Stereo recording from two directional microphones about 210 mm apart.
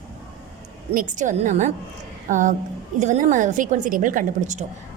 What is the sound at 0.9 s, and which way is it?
A woman's voice, 40° right (ahead or behind).